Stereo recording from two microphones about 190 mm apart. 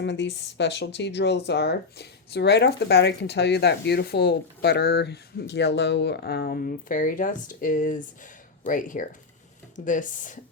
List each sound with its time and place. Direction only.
0.0 s speech: 70° left (ahead or behind); by 10.3 s 45° left (ahead or behind)